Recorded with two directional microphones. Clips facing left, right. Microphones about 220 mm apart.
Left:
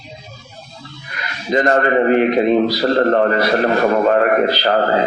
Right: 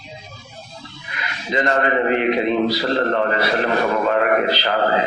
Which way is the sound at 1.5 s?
45° left (ahead or behind).